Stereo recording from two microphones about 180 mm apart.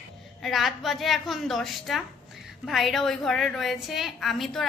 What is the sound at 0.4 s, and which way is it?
A woman's voice, centre (ahead or behind).